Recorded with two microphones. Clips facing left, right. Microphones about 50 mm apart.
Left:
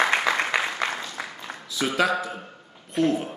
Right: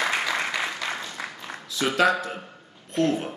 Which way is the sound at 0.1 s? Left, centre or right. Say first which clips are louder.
Left 3 dB; left.